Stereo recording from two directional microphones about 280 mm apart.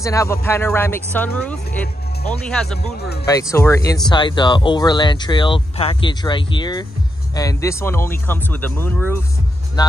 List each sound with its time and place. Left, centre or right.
0.0 s speech: centre
3.0 s speech: left
3.3 s speech: centre